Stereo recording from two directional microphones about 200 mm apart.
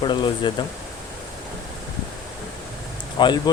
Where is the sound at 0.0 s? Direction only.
25° left (ahead or behind).